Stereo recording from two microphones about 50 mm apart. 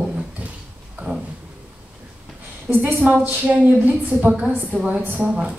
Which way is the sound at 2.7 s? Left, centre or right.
Centre.